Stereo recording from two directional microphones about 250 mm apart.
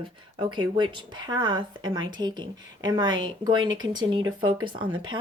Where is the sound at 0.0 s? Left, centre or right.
Centre.